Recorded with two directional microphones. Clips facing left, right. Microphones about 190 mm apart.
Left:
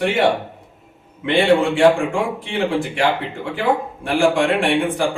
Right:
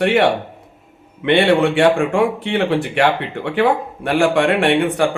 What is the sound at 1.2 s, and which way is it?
A man's voice, 70° right (ahead or behind).